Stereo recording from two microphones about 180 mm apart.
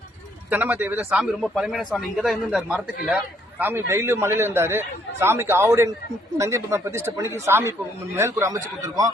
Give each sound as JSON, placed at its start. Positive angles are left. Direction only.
{"t": 0.5, "sound": "a man's voice", "side_deg": -10}